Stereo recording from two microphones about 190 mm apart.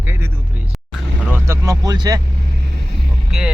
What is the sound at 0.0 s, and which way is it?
Vehicle, 10° right (ahead or behind).